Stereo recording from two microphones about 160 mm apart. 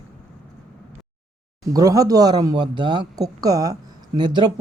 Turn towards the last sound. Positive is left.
turn(degrees=-30)  # may be behind; listen again after turning